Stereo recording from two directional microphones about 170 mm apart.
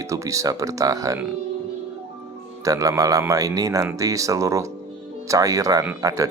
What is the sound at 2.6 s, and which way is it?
Speech, 20° right (ahead or behind).